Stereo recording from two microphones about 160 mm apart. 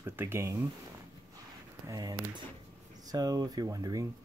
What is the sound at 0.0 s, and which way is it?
Speech, 15° right (ahead or behind).